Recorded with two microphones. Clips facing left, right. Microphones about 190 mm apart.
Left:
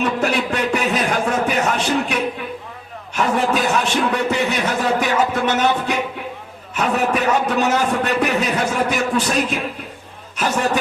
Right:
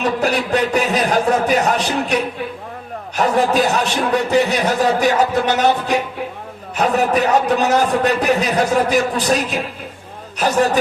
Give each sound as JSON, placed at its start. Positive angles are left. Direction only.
{"t": 0.0, "sound": "a man's voice", "side_deg": -35}
{"t": 3.2, "sound": "a man's voice", "side_deg": -35}